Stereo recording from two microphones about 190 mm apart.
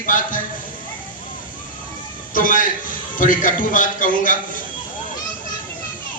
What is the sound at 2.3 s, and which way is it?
A man's voice, 45° left (ahead or behind).